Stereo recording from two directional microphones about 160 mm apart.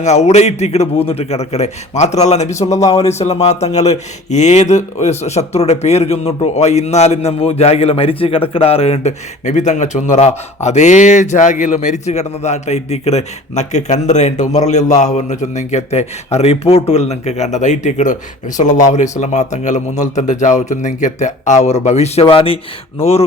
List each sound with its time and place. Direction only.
0.0 s a man's voice: 45° left (ahead or behind)